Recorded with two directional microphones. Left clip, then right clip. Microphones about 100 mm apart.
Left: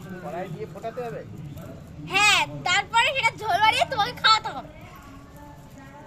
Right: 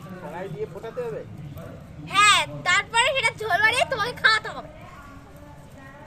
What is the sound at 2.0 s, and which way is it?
A woman's voice, 50° right (ahead or behind).